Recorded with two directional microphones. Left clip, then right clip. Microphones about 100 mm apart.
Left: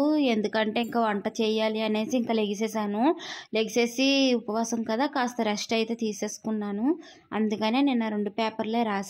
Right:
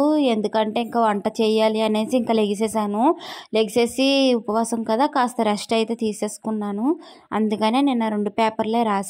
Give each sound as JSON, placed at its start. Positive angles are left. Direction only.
{"t": 0.0, "sound": "a woman's voice", "side_deg": -35}
{"t": 2.9, "sound": "a woman's voice", "side_deg": -25}
{"t": 3.5, "sound": "a woman's voice", "side_deg": -45}
{"t": 7.3, "sound": "a woman's voice", "side_deg": -50}